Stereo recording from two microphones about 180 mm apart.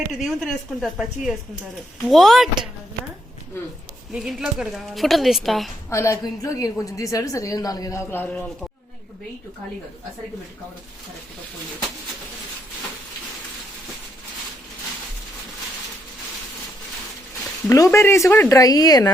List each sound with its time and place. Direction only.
0.3 s speech: centre (ahead or behind)
4.1 s speech: 5° right (ahead or behind)
5.9 s a woman's voice: 15° left (ahead or behind)
17.7 s a woman's voice: 15° left (ahead or behind)